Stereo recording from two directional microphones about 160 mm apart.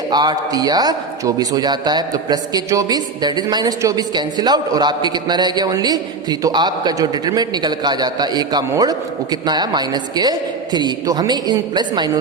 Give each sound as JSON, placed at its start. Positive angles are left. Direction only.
{"t": 0.1, "sound": "a man's voice", "side_deg": -25}